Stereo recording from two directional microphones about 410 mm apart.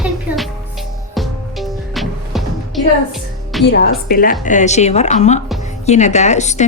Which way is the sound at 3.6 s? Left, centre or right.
Left.